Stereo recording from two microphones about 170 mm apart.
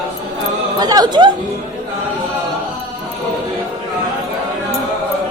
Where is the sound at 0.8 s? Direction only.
20° right (ahead or behind).